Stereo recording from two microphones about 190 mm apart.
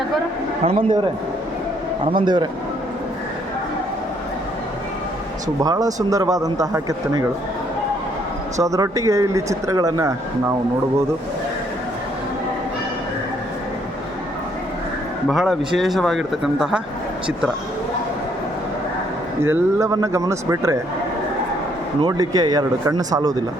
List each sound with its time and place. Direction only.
0.6 s a man's voice: 30° right (ahead or behind)
2.1 s speech: 25° right (ahead or behind)
5.6 s a man's voice: 20° right (ahead or behind)
8.6 s a man's voice: 15° right (ahead or behind)
15.3 s speech: centre (ahead or behind)
19.4 s a man's voice: 15° right (ahead or behind)
22.0 s speech: 20° right (ahead or behind)